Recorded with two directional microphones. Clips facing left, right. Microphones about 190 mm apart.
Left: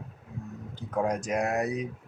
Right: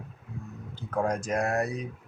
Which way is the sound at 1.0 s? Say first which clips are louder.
Even; 20° left (ahead or behind).